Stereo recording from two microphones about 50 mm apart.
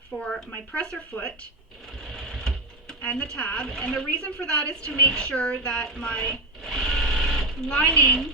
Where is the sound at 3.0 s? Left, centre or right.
Left.